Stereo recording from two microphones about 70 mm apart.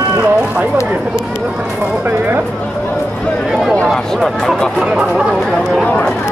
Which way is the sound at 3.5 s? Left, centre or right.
Centre.